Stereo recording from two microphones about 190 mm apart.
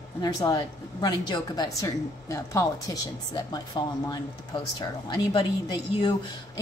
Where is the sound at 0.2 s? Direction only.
20° left (ahead or behind).